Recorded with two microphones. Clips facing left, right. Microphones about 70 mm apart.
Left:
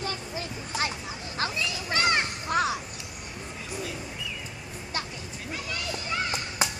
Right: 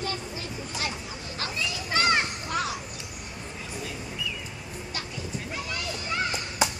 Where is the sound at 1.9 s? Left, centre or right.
Centre.